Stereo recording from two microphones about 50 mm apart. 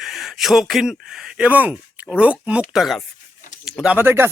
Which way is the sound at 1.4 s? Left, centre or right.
Right.